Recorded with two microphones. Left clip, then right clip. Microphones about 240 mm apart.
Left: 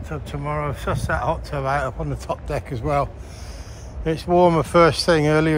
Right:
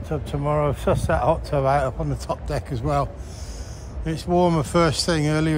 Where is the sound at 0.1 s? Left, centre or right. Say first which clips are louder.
Right 4 dB; centre.